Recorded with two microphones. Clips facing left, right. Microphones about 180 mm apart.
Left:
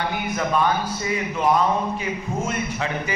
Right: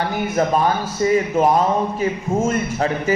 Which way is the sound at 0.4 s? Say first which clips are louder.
Right 4 dB; 40° right (ahead or behind).